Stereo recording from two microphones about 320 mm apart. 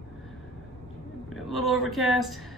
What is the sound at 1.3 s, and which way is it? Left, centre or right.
A woman's voice, centre.